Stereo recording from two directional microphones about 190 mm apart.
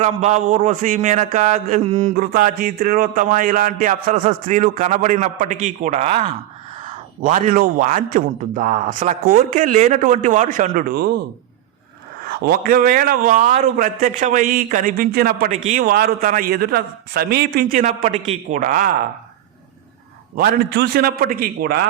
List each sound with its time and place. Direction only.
0.0 s a man's voice: 35° right (ahead or behind)
4.2 s a man's voice: 35° right (ahead or behind)
6.8 s a man's voice: 40° right (ahead or behind)
12.2 s a man's voice: 55° right (ahead or behind)
20.3 s a man's voice: 55° right (ahead or behind)